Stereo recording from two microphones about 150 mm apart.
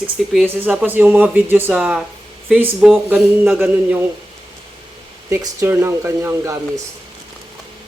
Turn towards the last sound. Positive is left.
turn(degrees=-20)  # may be behind; listen again after turning